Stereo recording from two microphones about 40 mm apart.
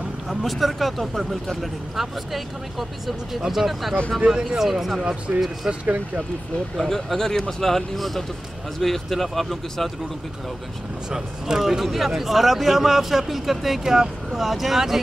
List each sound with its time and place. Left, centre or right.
0.3 s speech: centre
4.2 s speech: centre
4.6 s speech: centre
5.7 s speech: right
6.9 s speech: centre
11.1 s speech: centre